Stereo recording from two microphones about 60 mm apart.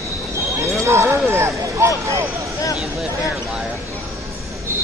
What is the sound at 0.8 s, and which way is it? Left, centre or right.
Basketball bounce, right.